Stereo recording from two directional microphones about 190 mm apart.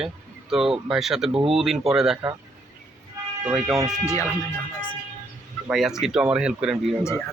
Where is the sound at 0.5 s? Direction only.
Centre (ahead or behind).